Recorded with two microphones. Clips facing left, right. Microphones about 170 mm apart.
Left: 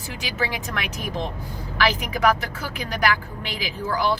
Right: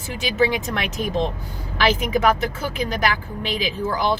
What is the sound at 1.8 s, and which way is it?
Speech, 20° right (ahead or behind).